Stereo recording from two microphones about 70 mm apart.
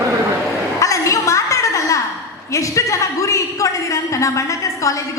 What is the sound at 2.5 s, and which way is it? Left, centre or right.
A woman's voice, left.